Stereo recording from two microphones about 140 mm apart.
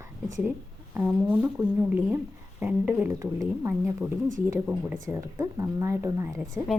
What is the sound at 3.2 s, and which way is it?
Speech, 25° right (ahead or behind).